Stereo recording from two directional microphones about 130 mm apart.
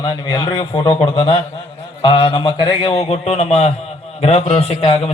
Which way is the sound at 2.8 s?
50° left (ahead or behind).